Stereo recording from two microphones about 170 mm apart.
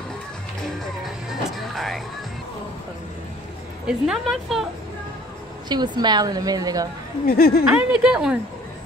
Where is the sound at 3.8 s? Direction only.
5° right (ahead or behind).